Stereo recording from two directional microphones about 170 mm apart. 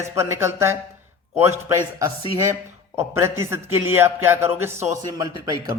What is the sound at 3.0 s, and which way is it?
Speech, 15° right (ahead or behind).